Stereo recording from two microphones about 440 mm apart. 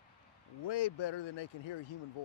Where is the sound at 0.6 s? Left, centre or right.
Left.